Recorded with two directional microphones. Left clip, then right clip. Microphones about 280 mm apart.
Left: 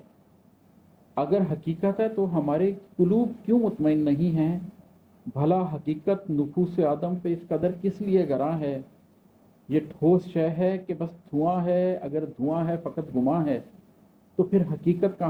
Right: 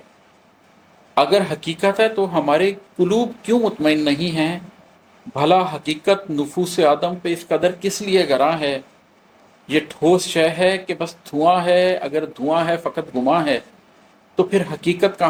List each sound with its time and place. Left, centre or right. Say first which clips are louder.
1.1 s speech: right 10 dB; centre